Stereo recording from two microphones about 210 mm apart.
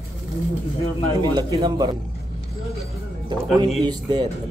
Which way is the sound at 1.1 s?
20° right (ahead or behind).